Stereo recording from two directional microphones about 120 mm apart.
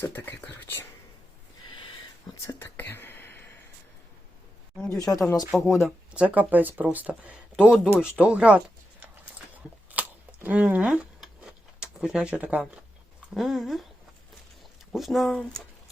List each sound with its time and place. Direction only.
0.0 s speech: 20° left (ahead or behind)
2.6 s speech: 20° left (ahead or behind)
4.9 s speech: 30° left (ahead or behind)
5.5 s speech: 5° right (ahead or behind)
9.9 s scissors: 15° right (ahead or behind)
13.3 s speech: centre (ahead or behind)
14.9 s speech: centre (ahead or behind)